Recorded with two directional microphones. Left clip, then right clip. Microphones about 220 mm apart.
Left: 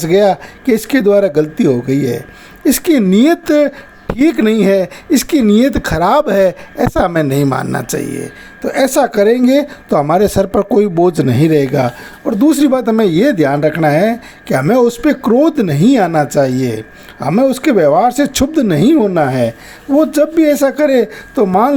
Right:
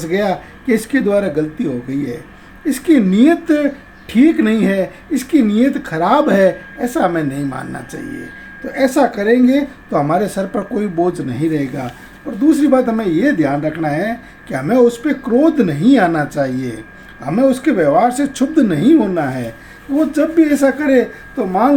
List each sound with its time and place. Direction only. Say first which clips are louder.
0.0 s speech: left 7 dB; 45° left (ahead or behind)